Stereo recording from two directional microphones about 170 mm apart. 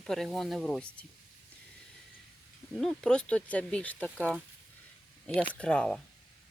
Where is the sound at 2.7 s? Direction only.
Centre (ahead or behind).